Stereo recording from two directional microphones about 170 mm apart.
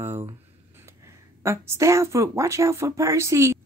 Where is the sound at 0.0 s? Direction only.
15° right (ahead or behind).